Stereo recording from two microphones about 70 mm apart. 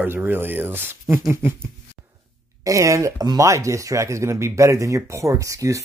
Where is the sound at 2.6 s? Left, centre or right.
Right.